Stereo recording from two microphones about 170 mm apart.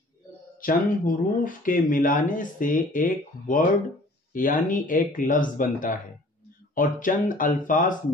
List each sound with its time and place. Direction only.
0.6 s speech: 55° left (ahead or behind)